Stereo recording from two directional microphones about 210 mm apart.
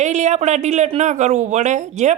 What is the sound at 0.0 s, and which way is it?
Speech, 35° right (ahead or behind).